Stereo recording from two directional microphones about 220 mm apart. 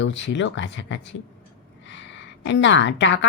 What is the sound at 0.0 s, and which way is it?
A woman's voice, 55° left (ahead or behind).